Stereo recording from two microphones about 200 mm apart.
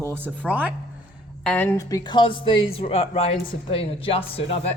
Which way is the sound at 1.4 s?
10° left (ahead or behind).